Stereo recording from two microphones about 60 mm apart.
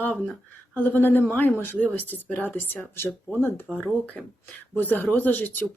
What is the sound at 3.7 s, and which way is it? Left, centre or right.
Speech, left.